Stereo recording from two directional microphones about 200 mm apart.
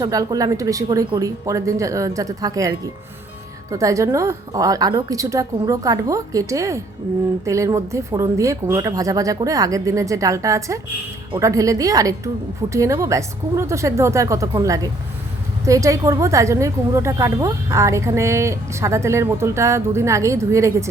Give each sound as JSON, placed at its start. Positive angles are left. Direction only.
{"t": 0.0, "sound": "a woman's voice", "side_deg": -15}